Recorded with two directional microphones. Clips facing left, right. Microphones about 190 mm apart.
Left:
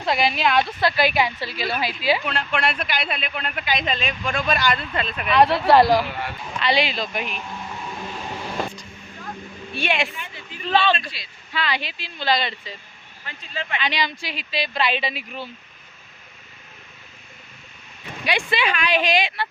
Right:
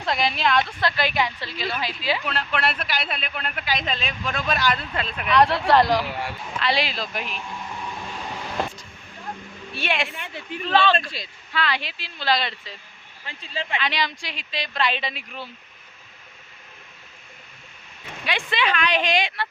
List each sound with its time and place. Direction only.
0.0 s a woman's voice: 5° left (ahead or behind)
2.2 s a man's voice: centre (ahead or behind)
9.7 s a man's voice: centre (ahead or behind)
11.2 s speech: 45° right (ahead or behind)
11.5 s a man's voice: centre (ahead or behind)
13.2 s speech: 30° right (ahead or behind)
13.7 s a man's voice: centre (ahead or behind)
18.3 s a woman's voice: 10° left (ahead or behind)